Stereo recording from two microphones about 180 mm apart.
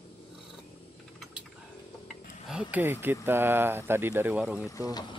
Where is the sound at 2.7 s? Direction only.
10° right (ahead or behind).